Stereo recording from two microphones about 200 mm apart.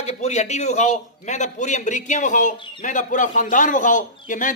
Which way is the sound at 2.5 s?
25° left (ahead or behind).